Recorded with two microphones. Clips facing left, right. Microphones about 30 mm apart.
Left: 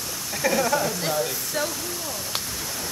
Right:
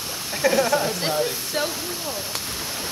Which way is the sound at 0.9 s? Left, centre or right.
Right.